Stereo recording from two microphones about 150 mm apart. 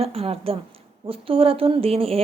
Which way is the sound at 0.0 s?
40° right (ahead or behind).